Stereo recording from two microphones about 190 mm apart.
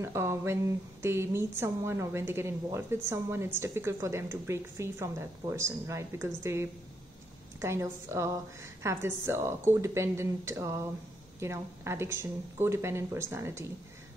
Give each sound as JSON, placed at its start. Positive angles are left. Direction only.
{"t": 0.0, "sound": "a woman's voice", "side_deg": -15}